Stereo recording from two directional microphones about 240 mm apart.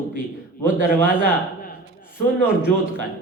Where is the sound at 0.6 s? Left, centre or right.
Left.